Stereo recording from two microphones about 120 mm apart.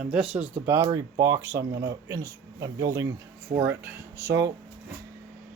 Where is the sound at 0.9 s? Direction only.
30° right (ahead or behind).